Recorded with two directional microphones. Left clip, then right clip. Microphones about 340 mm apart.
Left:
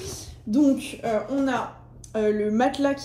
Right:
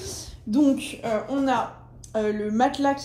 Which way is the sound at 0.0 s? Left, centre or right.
Centre.